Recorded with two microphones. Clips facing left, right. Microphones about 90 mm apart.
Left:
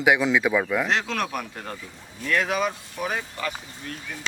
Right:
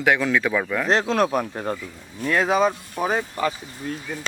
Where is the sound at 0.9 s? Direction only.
35° right (ahead or behind).